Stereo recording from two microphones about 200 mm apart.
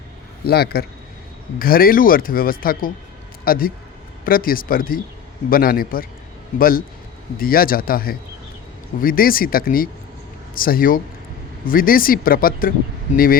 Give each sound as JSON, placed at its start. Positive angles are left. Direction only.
{"t": 0.4, "sound": "a man's voice", "side_deg": 50}